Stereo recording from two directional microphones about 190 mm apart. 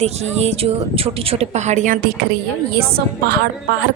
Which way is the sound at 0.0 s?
35° right (ahead or behind).